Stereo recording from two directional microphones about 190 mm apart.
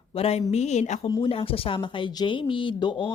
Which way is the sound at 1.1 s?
25° left (ahead or behind).